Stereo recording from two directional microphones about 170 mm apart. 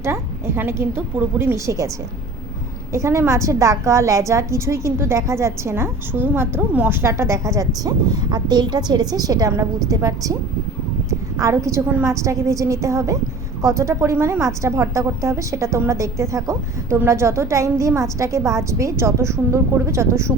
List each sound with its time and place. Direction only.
0.0 s a woman's voice: 15° right (ahead or behind)
2.9 s a woman's voice: 15° right (ahead or behind)